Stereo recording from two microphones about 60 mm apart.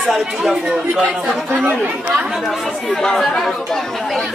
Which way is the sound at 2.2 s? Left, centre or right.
Centre.